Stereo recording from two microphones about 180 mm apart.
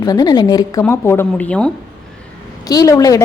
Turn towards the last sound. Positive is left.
turn(degrees=20)  # may be behind; listen again after turning